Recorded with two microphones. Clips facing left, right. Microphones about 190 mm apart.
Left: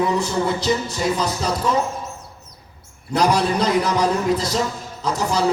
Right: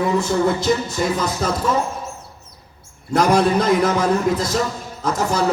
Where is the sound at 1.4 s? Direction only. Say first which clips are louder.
Right 3 dB; 50° right (ahead or behind).